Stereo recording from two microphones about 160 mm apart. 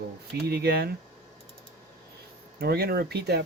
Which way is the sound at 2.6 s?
80° right.